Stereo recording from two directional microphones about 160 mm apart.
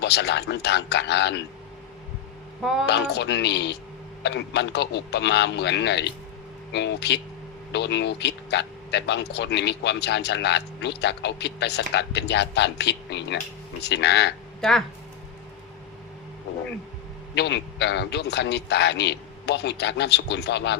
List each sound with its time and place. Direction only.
0.0 s speech: 90° left
2.8 s speech: 90° left
14.6 s speech: centre (ahead or behind)
16.5 s a sound: 90° left
17.3 s speech: 90° left